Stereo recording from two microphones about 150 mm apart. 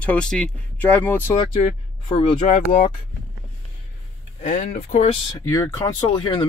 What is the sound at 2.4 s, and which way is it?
Speech, 60° left (ahead or behind).